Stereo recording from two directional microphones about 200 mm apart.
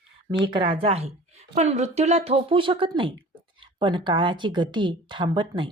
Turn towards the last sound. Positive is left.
turn(degrees=-25)  # may be behind; listen again after turning